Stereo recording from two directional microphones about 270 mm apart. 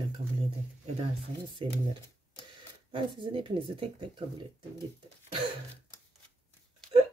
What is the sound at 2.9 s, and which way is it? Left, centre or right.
Speech, centre.